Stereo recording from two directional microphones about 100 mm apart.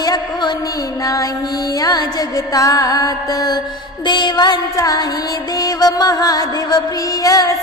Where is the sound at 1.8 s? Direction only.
40° left (ahead or behind).